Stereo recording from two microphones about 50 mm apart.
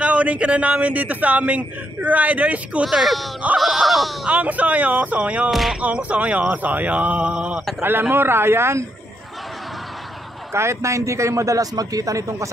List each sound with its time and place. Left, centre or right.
0.0 s a man's voice: right
2.8 s a sound: centre
4.3 s speech: right
5.5 s a sound: centre
5.8 s a man's voice: right
7.8 s a man's voice: right
10.5 s a man's voice: right